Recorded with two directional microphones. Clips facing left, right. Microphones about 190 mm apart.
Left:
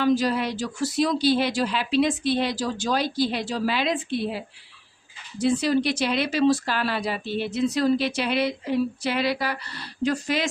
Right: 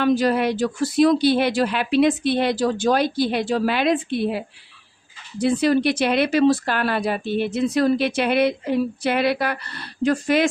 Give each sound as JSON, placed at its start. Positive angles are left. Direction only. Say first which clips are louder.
{"t": 0.0, "sound": "speech", "louder": "right 3 dB", "side_deg": -55}